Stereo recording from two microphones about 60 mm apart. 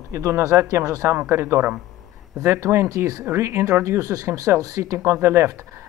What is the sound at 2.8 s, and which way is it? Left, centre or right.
Speech, right.